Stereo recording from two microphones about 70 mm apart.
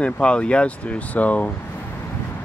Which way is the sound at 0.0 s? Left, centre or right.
Centre.